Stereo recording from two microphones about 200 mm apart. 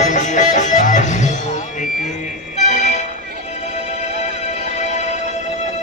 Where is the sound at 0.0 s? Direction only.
35° left (ahead or behind).